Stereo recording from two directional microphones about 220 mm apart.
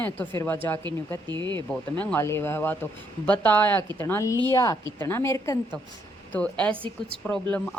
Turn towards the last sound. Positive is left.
turn(degrees=5)  # may be behind; listen again after turning